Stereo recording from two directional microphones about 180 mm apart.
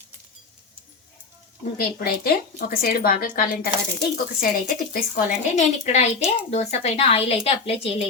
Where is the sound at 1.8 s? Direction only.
55° left (ahead or behind).